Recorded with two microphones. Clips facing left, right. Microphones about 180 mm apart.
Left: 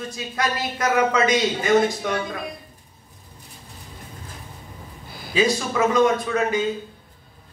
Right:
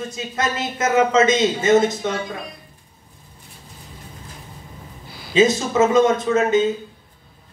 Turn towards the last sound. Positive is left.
turn(degrees=-25)  # may be behind; listen again after turning